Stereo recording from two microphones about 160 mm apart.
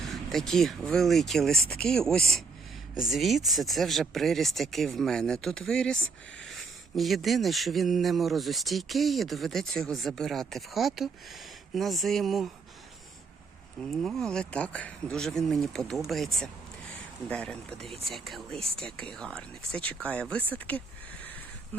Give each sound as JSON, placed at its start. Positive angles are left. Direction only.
{"t": 0.0, "sound": "a man's voice", "side_deg": 0}
{"t": 13.8, "sound": "a man's voice", "side_deg": 0}
{"t": 21.7, "sound": "a sound", "side_deg": 10}